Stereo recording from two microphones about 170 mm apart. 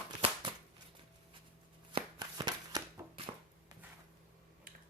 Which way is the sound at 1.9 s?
25° right (ahead or behind).